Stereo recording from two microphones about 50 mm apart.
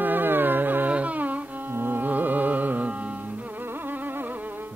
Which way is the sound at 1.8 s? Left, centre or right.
Right.